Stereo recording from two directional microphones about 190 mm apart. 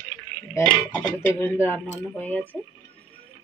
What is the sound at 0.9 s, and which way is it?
Speech, 10° left (ahead or behind).